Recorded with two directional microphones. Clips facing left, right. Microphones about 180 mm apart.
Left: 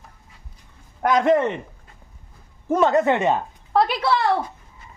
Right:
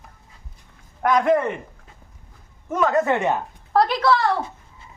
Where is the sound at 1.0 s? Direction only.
25° left (ahead or behind).